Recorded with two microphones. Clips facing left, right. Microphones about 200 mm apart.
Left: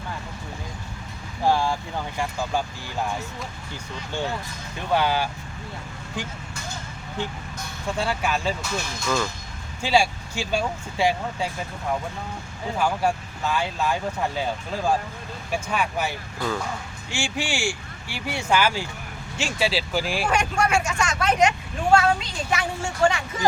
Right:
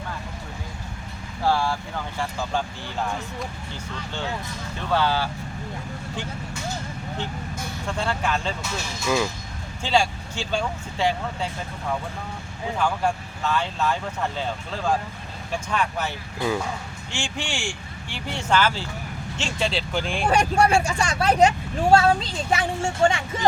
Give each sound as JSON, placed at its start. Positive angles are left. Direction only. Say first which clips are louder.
{"t": 1.5, "sound": "speech", "louder": "left 1 dB", "side_deg": 15}
{"t": 4.9, "sound": "speech", "louder": "left 1 dB", "side_deg": 15}
{"t": 7.9, "sound": "speech", "louder": "left 1 dB", "side_deg": 10}
{"t": 9.0, "sound": "speech", "louder": "right 3 dB", "side_deg": -5}
{"t": 9.8, "sound": "speech", "louder": "left 1 dB", "side_deg": 10}
{"t": 12.8, "sound": "speech", "louder": "left 1 dB", "side_deg": 10}
{"t": 16.4, "sound": "speech", "louder": "right 3 dB", "side_deg": -15}
{"t": 17.1, "sound": "speech", "louder": "left 3 dB", "side_deg": 10}
{"t": 20.2, "sound": "speech", "louder": "right 7 dB", "side_deg": -35}